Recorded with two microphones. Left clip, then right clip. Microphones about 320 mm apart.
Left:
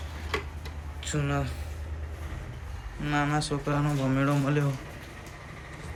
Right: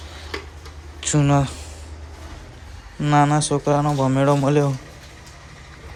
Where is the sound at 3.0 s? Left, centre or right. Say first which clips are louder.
Right 10 dB; centre.